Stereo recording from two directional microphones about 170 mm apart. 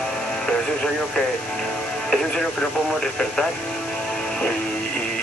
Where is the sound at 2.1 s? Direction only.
5° left (ahead or behind).